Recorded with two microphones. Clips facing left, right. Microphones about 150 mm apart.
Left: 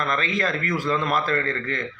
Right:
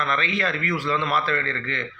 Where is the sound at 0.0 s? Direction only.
40° left (ahead or behind).